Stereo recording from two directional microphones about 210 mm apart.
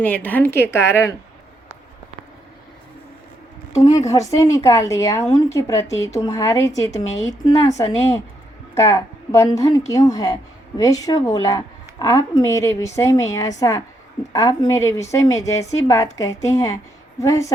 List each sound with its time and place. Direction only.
0.0 s a woman's voice: 10° left (ahead or behind)
3.8 s a woman's voice: 15° left (ahead or behind)